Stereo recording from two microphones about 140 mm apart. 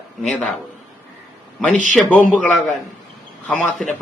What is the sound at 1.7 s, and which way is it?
Speech, 65° right (ahead or behind).